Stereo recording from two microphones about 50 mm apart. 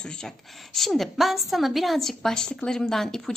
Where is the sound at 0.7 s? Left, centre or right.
Centre.